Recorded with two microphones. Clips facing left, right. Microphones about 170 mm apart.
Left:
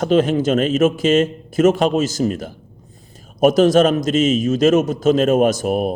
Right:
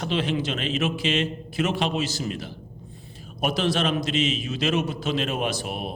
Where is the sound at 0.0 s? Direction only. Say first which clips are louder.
Left 10 dB; 45° left (ahead or behind).